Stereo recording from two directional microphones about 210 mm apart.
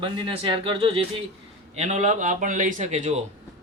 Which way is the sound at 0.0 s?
25° right (ahead or behind).